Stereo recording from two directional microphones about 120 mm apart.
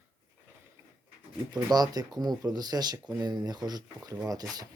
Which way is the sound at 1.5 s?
35° right (ahead or behind).